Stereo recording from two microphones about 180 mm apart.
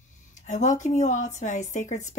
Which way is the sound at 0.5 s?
40° left (ahead or behind).